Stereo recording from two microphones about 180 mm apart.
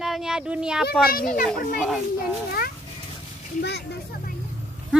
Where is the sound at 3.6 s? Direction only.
65° left (ahead or behind).